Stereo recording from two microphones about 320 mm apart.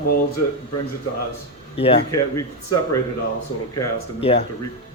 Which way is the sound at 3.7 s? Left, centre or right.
Centre.